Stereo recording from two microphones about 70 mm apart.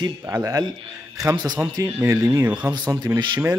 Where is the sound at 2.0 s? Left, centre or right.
Right.